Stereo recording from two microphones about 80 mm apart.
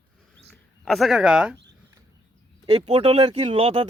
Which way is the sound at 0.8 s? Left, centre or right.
Centre.